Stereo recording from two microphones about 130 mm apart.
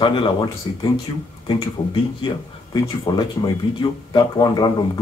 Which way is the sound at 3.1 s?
25° left (ahead or behind).